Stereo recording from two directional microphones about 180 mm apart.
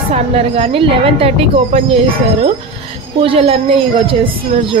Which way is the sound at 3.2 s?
30° right (ahead or behind).